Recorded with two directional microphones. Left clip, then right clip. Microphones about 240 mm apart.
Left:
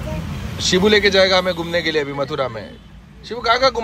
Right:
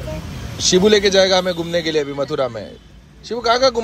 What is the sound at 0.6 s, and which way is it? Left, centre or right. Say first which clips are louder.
A man's voice: right 1 dB; centre.